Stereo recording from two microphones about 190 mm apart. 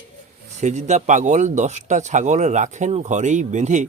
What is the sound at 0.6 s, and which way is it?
Speech, 35° right (ahead or behind).